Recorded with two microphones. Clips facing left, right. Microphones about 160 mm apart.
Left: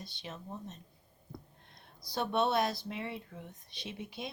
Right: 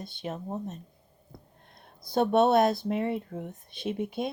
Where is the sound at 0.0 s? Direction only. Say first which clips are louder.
Right 9 dB; 50° right (ahead or behind).